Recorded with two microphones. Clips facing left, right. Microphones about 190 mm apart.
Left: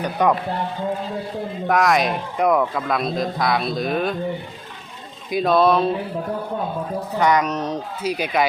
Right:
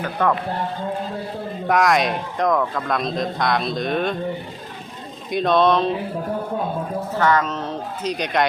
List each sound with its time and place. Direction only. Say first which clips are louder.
0.0 s speech: left 2 dB; 15° left (ahead or behind)
1.6 s a man's voice: even; centre (ahead or behind)
5.3 s a man's voice: left 1 dB; 5° left (ahead or behind)
7.2 s speech: left 1 dB; 15° left (ahead or behind)
8.1 s a man's voice: even; 5° left (ahead or behind)